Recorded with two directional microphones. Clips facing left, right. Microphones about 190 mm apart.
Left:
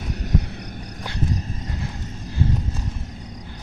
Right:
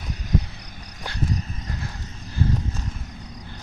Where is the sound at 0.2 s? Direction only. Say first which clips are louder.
Even; 65° left (ahead or behind).